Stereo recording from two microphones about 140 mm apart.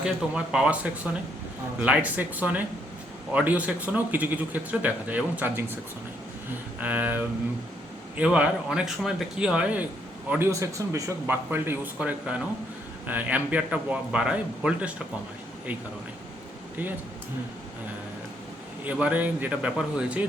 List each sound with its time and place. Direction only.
0.0 s a man's voice: 5° right (ahead or behind)
6.7 s a man's voice: 10° right (ahead or behind)
18.9 s a man's voice: 10° right (ahead or behind)